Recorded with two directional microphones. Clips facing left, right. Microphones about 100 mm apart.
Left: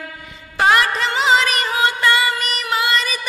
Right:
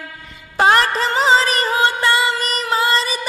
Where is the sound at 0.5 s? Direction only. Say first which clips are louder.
Right 2 dB; 35° right (ahead or behind).